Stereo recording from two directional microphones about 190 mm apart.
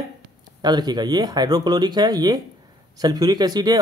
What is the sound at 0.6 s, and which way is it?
Speech, 20° right (ahead or behind).